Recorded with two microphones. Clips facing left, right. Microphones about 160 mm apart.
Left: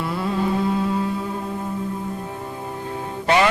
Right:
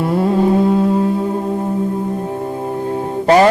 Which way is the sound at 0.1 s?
40° right (ahead or behind).